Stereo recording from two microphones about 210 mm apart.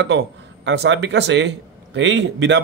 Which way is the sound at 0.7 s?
60° right (ahead or behind).